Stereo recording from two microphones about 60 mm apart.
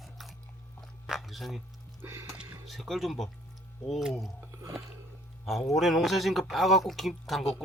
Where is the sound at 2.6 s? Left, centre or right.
Centre.